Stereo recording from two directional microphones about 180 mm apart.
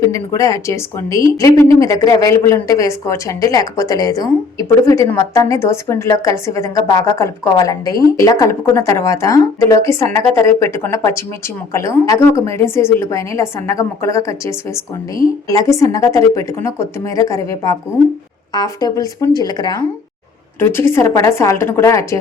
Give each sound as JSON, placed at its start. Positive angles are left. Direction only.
{"t": 0.0, "sound": "speech", "side_deg": 15}